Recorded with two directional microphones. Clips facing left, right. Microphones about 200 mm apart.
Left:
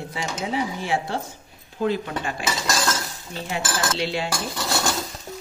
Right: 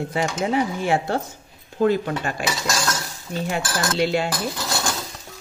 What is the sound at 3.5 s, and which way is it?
Speech, 50° right (ahead or behind).